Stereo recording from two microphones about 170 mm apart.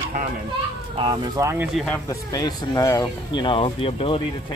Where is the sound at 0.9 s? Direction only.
35° right (ahead or behind).